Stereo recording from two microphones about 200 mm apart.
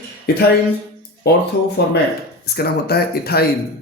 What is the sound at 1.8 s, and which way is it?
Speech, 55° left (ahead or behind).